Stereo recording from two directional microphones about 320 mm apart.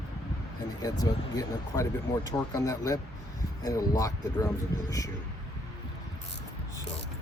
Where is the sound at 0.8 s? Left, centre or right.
Centre.